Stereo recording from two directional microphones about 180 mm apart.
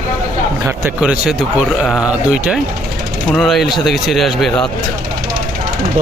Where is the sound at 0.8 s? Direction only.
5° right (ahead or behind).